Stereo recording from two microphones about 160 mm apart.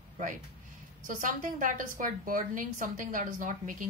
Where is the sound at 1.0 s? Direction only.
55° right (ahead or behind).